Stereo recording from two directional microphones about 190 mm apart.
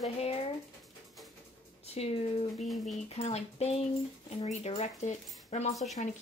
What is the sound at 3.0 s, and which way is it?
Speech, 35° left (ahead or behind).